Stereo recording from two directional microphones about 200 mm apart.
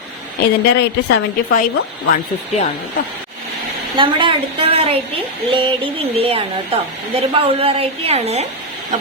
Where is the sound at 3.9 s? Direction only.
25° right (ahead or behind).